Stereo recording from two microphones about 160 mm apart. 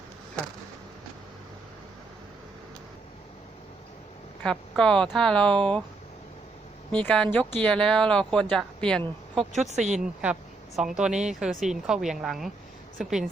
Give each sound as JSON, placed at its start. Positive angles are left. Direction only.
{"t": 4.4, "sound": "speech", "side_deg": 5}
{"t": 6.9, "sound": "speech", "side_deg": 5}
{"t": 9.5, "sound": "speech", "side_deg": -45}
{"t": 10.8, "sound": "speech", "side_deg": -5}